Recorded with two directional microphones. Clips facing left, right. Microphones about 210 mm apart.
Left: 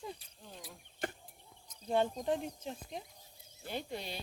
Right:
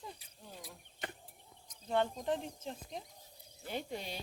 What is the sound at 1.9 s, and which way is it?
Speech, 15° left (ahead or behind).